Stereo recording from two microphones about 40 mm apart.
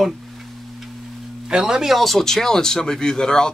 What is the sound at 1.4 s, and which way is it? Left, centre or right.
Speech, centre.